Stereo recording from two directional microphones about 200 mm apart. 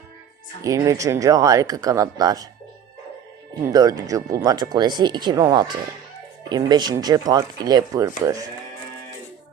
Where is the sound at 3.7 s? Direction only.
20° right (ahead or behind).